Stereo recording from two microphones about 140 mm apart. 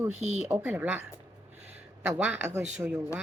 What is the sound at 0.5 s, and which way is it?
Speech, 10° right (ahead or behind).